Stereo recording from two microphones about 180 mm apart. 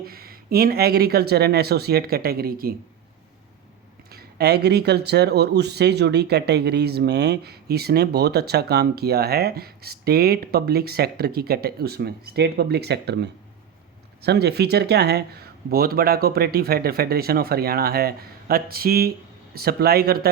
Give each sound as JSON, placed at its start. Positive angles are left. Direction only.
{"t": 0.0, "sound": "speech", "side_deg": -55}
{"t": 4.1, "sound": "speech", "side_deg": -60}